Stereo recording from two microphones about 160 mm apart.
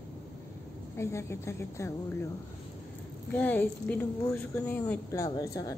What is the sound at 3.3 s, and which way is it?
A woman's voice, 10° left (ahead or behind).